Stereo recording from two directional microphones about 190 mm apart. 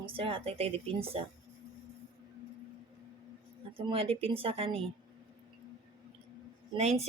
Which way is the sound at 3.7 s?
30° right (ahead or behind).